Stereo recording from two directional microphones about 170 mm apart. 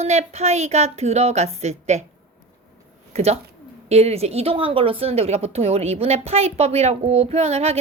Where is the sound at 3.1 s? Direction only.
40° right (ahead or behind).